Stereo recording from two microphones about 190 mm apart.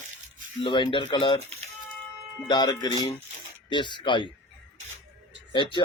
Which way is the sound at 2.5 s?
20° left (ahead or behind).